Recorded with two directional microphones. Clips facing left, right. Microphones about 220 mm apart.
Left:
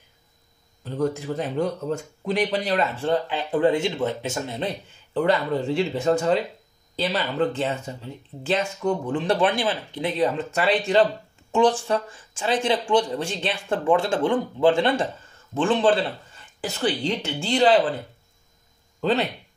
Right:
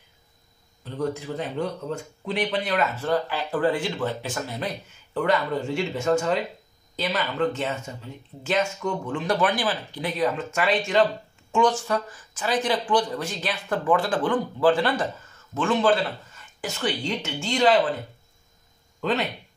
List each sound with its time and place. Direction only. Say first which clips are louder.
0.8 s a man's voice: left 3 dB; 45° left (ahead or behind)
18.9 s speech: left 3 dB; 35° left (ahead or behind)